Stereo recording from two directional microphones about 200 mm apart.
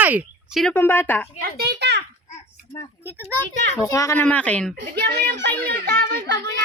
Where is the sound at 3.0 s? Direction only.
10° right (ahead or behind).